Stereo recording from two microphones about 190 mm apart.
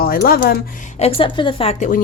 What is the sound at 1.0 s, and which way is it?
Speech, 25° left (ahead or behind).